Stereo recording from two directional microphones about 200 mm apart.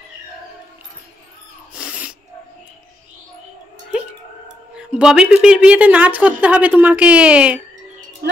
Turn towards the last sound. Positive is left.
turn(degrees=-5)  # may be behind; listen again after turning